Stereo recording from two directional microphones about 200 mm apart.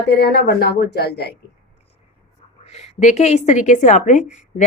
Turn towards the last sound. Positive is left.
turn(degrees=40)  # may be behind; listen again after turning